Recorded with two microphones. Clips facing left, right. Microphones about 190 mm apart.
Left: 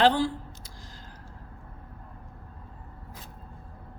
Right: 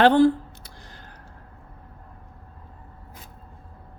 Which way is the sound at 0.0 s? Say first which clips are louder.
Right 7 dB; 55° right (ahead or behind).